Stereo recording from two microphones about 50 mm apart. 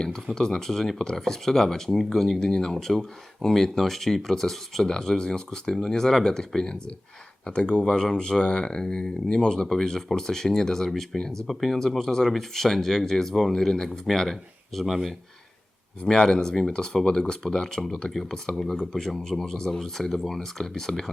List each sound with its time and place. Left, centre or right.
0.0 s speech: centre
16.0 s speech: centre